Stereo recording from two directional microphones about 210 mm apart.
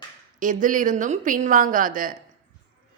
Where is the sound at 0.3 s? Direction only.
40° right (ahead or behind).